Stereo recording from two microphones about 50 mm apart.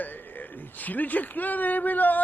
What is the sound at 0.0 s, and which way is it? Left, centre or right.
Speech, left.